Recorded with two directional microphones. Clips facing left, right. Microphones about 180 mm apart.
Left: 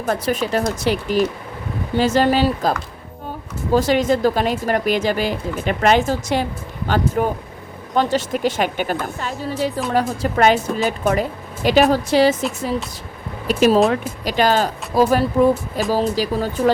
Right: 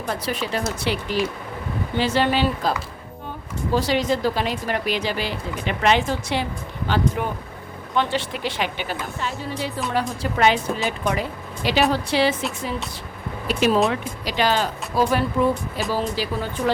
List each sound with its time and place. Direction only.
0.0 s speech: 45° left (ahead or behind)
3.8 s speech: 50° left (ahead or behind)
13.5 s speech: 45° left (ahead or behind)